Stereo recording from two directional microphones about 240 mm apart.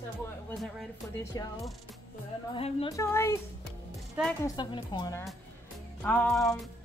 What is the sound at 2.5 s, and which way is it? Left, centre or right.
Speech, left.